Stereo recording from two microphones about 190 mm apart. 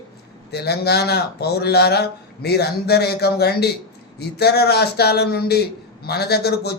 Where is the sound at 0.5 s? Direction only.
60° left (ahead or behind).